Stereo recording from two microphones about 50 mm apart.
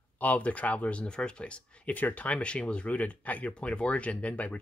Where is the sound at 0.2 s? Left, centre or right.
Left.